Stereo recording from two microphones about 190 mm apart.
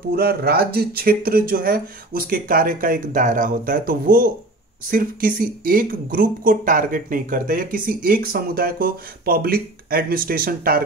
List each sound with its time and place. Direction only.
0.1 s speech: 55° right (ahead or behind)